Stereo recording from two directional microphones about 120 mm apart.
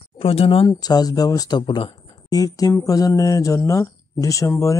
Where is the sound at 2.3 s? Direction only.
30° left (ahead or behind).